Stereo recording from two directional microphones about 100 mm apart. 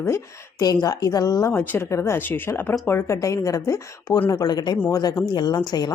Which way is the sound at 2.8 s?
25° left (ahead or behind).